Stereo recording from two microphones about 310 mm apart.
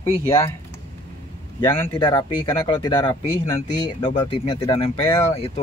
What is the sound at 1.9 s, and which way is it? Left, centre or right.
Speech, centre.